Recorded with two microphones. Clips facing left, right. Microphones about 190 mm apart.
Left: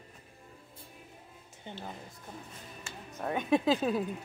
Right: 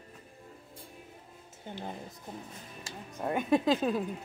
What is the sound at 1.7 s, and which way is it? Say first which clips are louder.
Speech: right 2 dB; 5° right (ahead or behind).